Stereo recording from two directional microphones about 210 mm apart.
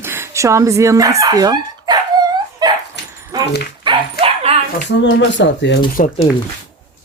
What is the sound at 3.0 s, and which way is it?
Dog, 55° left (ahead or behind).